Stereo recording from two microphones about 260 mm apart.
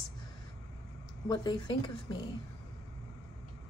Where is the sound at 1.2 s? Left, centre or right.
Centre.